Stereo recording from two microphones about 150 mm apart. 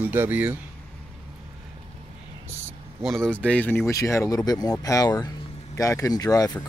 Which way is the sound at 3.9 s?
20° left (ahead or behind).